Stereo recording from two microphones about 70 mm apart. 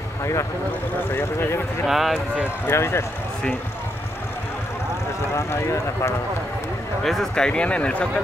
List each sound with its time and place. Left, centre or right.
0.2 s speech: left
1.1 s speech: left
1.9 s speech: centre
2.7 s speech: left
5.3 s speech: left
7.0 s speech: centre